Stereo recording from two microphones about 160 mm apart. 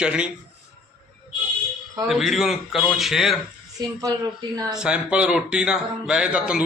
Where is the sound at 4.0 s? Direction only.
20° right (ahead or behind).